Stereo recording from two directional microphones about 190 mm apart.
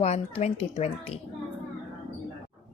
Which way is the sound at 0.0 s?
35° left (ahead or behind).